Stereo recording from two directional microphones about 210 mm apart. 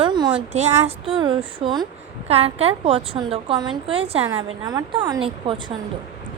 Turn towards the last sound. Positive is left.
turn(degrees=-25)  # may be behind; listen again after turning